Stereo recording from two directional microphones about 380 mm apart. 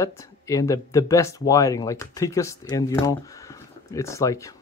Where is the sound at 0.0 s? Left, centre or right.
Centre.